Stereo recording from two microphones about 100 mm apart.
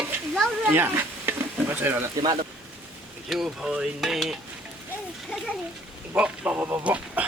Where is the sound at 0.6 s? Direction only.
20° right (ahead or behind).